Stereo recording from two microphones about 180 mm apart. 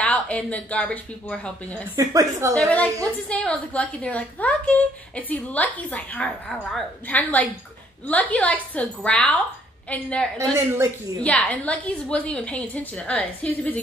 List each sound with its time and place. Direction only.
0.0 s a woman's voice: 5° left (ahead or behind)
2.0 s a woman's voice: 15° right (ahead or behind)
2.5 s a woman's voice: 5° left (ahead or behind)
11.2 s a woman's voice: 10° left (ahead or behind)